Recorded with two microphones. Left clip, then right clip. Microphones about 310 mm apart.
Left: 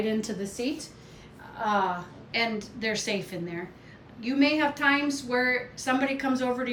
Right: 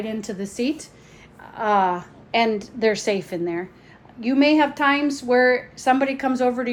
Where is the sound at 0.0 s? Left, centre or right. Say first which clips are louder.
Right 1 dB; right.